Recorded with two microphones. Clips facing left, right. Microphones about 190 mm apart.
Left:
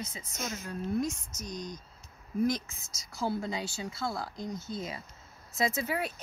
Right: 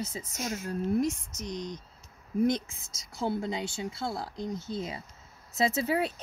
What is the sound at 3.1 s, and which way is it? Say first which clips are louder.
Speech: right 2 dB; 25° right (ahead or behind).